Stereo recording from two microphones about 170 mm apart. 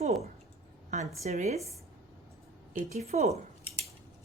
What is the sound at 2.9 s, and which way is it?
Speech, 40° right (ahead or behind).